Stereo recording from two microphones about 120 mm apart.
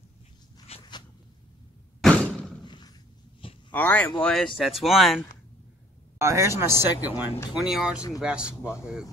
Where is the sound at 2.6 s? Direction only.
40° left (ahead or behind).